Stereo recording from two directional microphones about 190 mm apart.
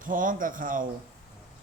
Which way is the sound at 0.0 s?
45° right (ahead or behind).